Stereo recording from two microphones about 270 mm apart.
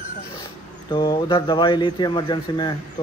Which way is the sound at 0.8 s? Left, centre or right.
Centre.